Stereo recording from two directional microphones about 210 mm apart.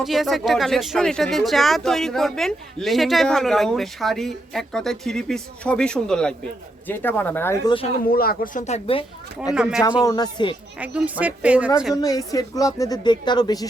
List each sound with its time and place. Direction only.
0.0 s a woman's voice: centre (ahead or behind)
8.0 s speech: 45° left (ahead or behind)
8.6 s speech: 30° left (ahead or behind)
9.6 s speech: 5° right (ahead or behind)
10.0 s speech: 20° left (ahead or behind)
10.8 s speech: 5° right (ahead or behind)
11.9 s a woman's voice: 20° left (ahead or behind)